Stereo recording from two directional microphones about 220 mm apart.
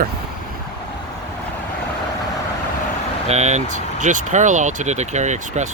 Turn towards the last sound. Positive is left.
turn(degrees=-30)  # may be behind; listen again after turning